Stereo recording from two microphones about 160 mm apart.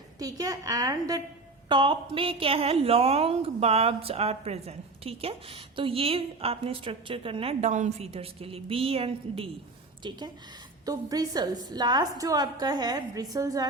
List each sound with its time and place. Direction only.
0.2 s a woman's voice: 20° right (ahead or behind)